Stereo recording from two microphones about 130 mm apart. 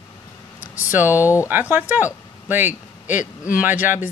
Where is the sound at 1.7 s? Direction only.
15° right (ahead or behind).